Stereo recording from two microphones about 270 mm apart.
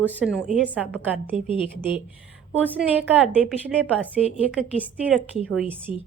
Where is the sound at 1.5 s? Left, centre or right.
Centre.